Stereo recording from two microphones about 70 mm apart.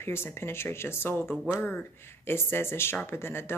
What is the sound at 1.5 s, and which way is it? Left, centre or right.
Speech, left.